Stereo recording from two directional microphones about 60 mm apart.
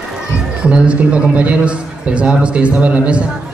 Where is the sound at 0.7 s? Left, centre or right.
Centre.